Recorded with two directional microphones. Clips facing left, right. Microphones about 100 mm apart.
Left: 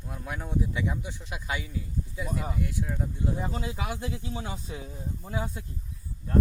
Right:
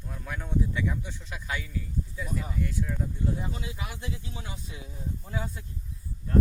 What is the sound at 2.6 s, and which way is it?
Speech, 15° left (ahead or behind).